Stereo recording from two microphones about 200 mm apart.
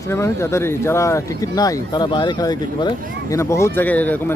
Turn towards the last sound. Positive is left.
turn(degrees=10)  # may be behind; listen again after turning